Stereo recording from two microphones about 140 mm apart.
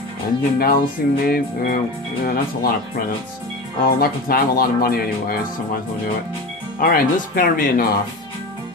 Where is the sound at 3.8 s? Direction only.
90° left.